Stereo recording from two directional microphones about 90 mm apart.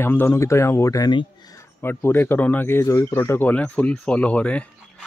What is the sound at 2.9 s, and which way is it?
Speech, 35° left (ahead or behind).